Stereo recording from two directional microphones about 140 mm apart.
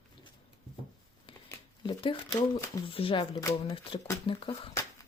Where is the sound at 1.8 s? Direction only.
35° left (ahead or behind).